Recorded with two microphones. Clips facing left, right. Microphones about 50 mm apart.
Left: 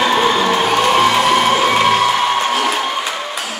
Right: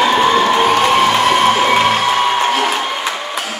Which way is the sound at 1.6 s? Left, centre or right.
Centre.